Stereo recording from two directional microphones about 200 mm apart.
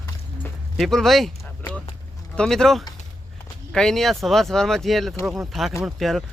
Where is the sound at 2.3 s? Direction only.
5° left (ahead or behind).